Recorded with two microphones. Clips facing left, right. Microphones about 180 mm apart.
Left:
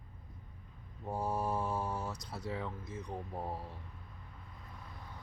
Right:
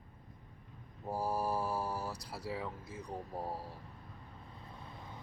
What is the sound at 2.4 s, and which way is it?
Mantra, 5° right (ahead or behind).